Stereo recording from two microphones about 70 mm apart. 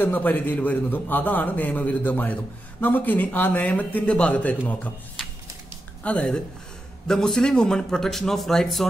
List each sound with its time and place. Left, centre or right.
0.0 s a man's voice: left
6.0 s a man's voice: centre